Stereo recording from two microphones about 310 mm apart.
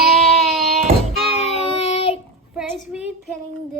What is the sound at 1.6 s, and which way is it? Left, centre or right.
Child singing, centre.